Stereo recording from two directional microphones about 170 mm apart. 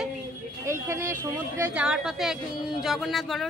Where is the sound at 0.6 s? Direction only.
15° right (ahead or behind).